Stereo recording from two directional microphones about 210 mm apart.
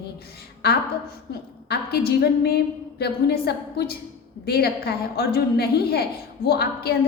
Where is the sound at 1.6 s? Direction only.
50° left (ahead or behind).